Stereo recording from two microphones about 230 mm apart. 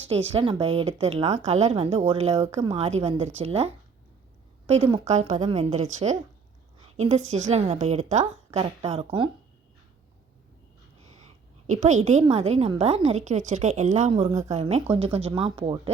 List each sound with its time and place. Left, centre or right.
0.3 s a woman's voice: right
11.6 s a woman's voice: right